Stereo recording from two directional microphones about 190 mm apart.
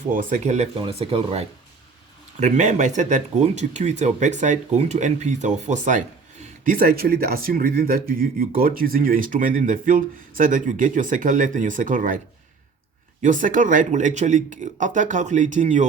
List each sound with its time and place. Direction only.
0.1 s speech: 45° right (ahead or behind)
13.2 s speech: 45° right (ahead or behind)